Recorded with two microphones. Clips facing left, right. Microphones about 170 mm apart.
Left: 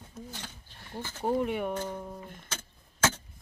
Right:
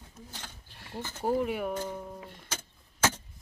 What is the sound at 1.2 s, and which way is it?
Speech, 5° right (ahead or behind).